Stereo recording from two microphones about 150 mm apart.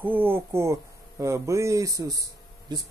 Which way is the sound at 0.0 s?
15° right (ahead or behind).